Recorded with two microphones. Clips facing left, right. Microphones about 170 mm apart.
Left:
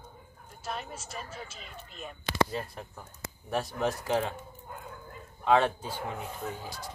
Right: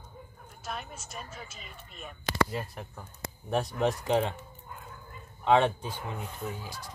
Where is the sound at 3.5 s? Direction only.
20° right (ahead or behind).